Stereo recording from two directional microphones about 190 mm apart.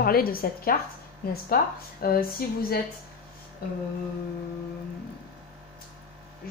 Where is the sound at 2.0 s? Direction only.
55° left (ahead or behind).